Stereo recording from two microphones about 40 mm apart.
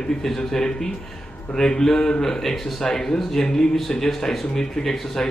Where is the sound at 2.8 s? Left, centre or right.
Centre.